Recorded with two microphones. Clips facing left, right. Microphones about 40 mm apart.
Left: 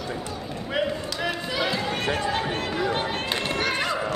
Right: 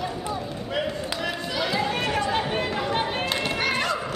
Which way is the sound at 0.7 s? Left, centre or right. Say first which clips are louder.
Left 2 dB; centre.